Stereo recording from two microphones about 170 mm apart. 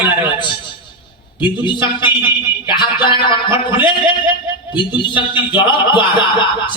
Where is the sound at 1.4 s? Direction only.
30° left (ahead or behind).